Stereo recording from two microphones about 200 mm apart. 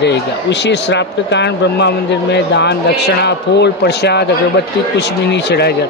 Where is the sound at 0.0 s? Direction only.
60° left (ahead or behind).